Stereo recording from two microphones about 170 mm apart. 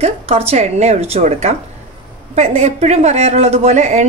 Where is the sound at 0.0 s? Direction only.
35° right (ahead or behind).